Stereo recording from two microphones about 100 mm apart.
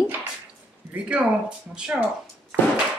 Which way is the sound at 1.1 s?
15° right (ahead or behind).